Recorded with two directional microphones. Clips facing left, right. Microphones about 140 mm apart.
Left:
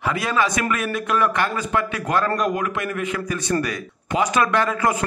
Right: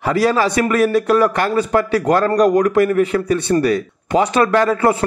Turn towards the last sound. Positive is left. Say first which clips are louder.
# right 6 dB
turn(degrees=-30)  # may be behind; listen again after turning